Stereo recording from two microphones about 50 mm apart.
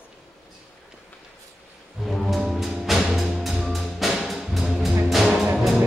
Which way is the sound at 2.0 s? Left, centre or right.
Centre.